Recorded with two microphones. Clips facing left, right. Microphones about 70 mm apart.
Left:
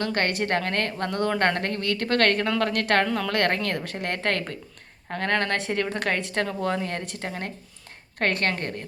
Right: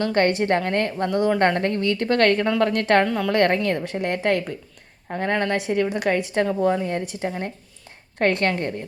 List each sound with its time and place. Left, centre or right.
0.0 s a woman's voice: right
8.2 s a woman's voice: right